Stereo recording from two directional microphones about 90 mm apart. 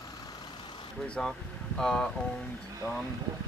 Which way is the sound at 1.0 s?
10° left (ahead or behind).